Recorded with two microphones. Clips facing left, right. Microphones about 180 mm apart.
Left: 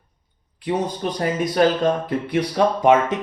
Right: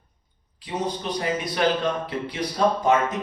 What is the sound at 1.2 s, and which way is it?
Speech, 45° left (ahead or behind).